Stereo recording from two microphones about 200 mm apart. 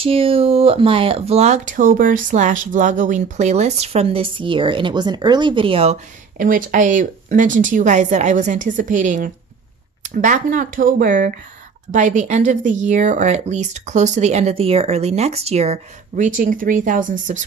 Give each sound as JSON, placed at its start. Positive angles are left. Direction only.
{"t": 0.0, "sound": "speech", "side_deg": -30}
{"t": 6.3, "sound": "speech", "side_deg": -40}